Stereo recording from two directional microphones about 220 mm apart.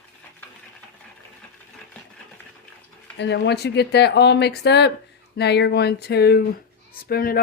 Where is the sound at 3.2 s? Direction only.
50° left (ahead or behind).